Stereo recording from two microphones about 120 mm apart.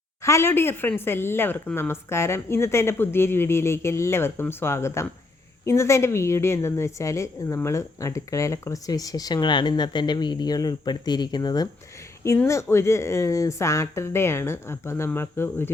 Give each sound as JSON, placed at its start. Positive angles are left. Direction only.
{"t": 0.2, "sound": "a woman's voice", "side_deg": 25}
{"t": 12.5, "sound": "a woman's voice", "side_deg": 25}